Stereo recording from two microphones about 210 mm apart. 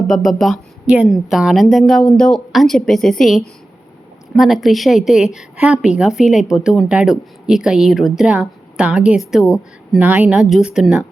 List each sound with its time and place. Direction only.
0.1 s a woman's voice: centre (ahead or behind)